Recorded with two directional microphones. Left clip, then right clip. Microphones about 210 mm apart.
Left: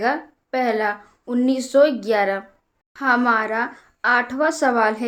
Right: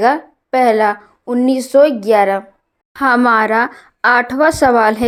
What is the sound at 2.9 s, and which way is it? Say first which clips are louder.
Speech: right 6 dB; 40° right (ahead or behind).